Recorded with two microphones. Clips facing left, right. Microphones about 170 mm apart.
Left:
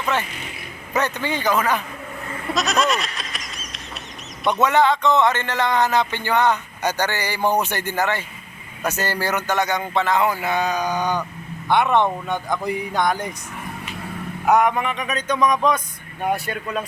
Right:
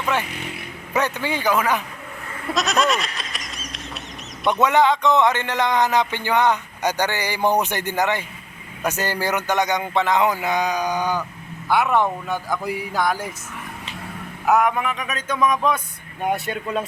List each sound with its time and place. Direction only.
0.9 s speech: 10° right (ahead or behind)
2.5 s goat: centre (ahead or behind)
4.6 s speech: 15° right (ahead or behind)
14.4 s speech: centre (ahead or behind)
16.2 s speech: 20° right (ahead or behind)